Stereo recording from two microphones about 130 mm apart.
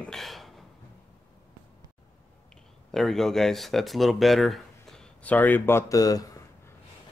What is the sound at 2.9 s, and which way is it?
Speech, centre (ahead or behind).